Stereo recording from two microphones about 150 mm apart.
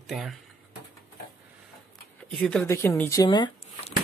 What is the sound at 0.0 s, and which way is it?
Speech, centre (ahead or behind).